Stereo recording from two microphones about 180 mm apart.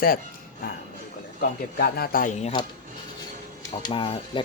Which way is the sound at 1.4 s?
60° left (ahead or behind).